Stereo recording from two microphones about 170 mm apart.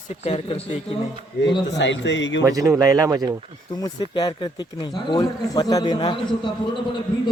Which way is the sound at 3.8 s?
25° left (ahead or behind).